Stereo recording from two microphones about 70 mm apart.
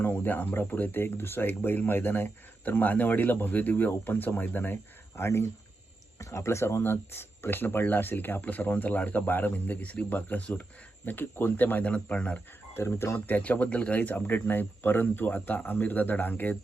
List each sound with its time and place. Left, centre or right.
0.0 s speech: left
12.7 s speech: left